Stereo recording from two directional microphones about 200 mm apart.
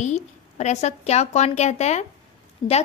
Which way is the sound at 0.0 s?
35° left (ahead or behind).